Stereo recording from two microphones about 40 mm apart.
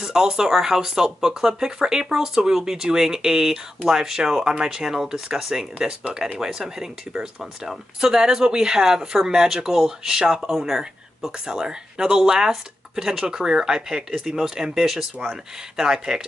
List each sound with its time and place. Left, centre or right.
0.0 s speech: centre